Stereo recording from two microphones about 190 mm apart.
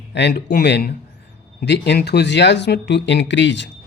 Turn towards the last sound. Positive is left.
turn(degrees=70)  # may be behind; listen again after turning